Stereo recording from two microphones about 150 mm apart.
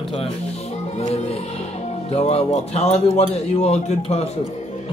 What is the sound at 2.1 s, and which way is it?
A man's voice, 45° left (ahead or behind).